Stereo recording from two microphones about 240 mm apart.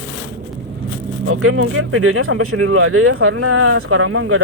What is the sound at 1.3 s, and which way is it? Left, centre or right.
Speech, right.